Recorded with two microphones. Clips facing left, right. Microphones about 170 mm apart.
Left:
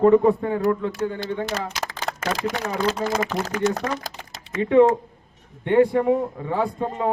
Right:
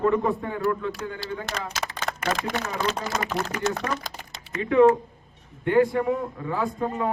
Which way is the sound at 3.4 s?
40° left (ahead or behind).